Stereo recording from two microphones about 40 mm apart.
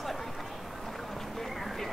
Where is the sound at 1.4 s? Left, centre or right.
Centre.